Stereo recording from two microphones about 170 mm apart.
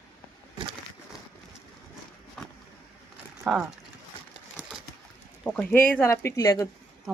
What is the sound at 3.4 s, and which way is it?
Speech, centre (ahead or behind).